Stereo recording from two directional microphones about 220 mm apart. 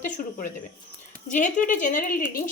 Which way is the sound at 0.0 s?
35° left (ahead or behind).